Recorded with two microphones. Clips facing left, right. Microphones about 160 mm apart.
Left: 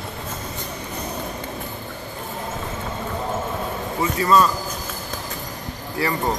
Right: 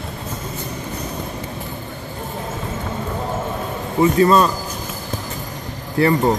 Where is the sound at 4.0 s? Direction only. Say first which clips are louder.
Right 5 dB; 25° right (ahead or behind).